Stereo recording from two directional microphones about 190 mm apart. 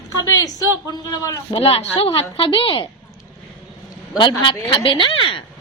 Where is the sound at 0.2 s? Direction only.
20° left (ahead or behind).